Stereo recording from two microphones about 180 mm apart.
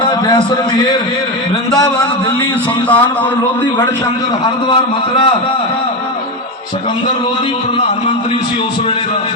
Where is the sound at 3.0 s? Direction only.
20° left (ahead or behind).